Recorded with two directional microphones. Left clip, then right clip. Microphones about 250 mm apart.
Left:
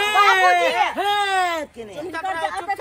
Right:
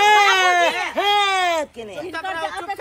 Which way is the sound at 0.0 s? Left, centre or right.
Centre.